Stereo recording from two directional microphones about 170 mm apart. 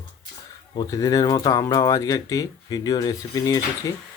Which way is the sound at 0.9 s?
20° left (ahead or behind).